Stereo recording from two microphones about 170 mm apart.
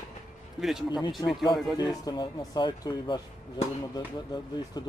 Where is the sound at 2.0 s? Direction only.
25° left (ahead or behind).